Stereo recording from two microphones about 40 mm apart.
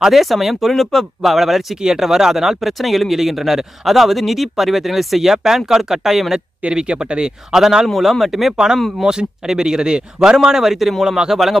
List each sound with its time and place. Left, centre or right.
0.1 s a man's voice: centre
6.7 s a man's voice: right
7.9 s speech: centre
9.0 s a man's voice: centre